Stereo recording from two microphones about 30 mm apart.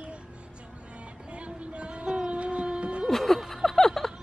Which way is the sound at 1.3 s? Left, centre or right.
Right.